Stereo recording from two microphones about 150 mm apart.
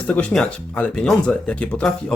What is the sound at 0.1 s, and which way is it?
Speech, 10° left (ahead or behind).